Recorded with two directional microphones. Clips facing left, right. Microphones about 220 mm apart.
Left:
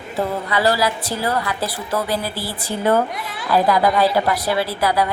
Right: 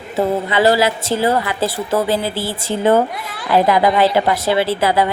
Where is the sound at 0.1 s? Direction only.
25° right (ahead or behind).